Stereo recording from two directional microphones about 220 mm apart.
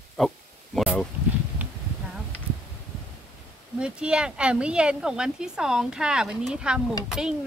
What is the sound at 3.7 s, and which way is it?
Speech, 5° right (ahead or behind).